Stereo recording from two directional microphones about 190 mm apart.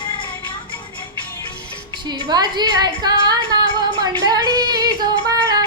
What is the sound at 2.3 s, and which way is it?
Speech, 20° right (ahead or behind).